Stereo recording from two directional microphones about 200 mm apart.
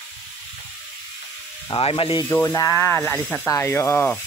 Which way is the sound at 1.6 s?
30° left (ahead or behind).